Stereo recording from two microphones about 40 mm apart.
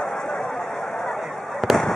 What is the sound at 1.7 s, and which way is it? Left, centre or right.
Fireworks, centre.